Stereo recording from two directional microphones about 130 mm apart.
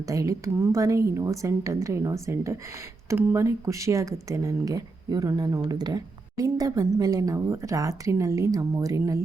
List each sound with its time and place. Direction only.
0.1 s speech: 25° right (ahead or behind)